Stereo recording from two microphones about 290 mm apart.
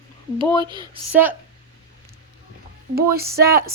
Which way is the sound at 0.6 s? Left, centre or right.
Centre.